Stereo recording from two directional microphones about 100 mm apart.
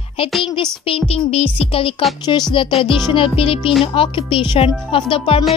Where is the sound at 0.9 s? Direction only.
75° left (ahead or behind).